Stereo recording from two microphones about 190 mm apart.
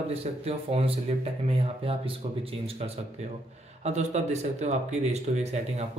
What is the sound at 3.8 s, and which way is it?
Speech, 35° right (ahead or behind).